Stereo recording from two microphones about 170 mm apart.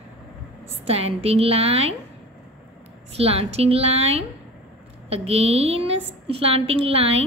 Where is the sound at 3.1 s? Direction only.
35° right (ahead or behind).